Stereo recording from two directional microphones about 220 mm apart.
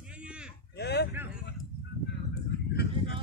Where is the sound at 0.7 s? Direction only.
50° left (ahead or behind).